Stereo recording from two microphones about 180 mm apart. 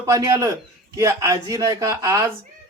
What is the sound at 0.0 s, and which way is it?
A man's voice, 15° right (ahead or behind).